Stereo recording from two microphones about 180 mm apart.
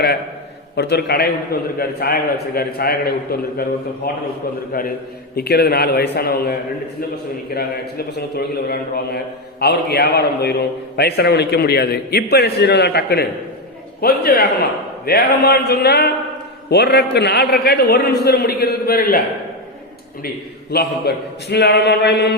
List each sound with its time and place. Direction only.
0.8 s a man's voice: 65° left (ahead or behind)
5.3 s a man's voice: 60° left (ahead or behind)
20.2 s a man's voice: 65° left (ahead or behind)